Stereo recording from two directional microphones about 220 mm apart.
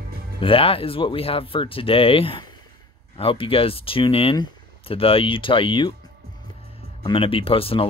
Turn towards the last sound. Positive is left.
turn(degrees=25)  # may be behind; listen again after turning